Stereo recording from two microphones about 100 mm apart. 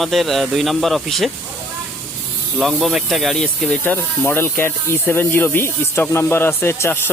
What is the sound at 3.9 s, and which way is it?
Speech, 20° left (ahead or behind).